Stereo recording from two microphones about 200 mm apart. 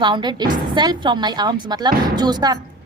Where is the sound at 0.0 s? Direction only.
20° right (ahead or behind).